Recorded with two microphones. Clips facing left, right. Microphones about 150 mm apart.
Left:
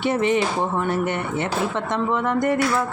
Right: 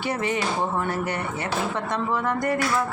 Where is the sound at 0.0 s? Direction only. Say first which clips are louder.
Left 6 dB; 20° left (ahead or behind).